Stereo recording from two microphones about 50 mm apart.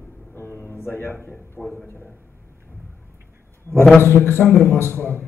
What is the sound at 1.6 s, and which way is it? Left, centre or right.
Speech, centre.